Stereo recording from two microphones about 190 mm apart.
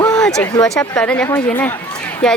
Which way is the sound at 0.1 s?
5° left (ahead or behind).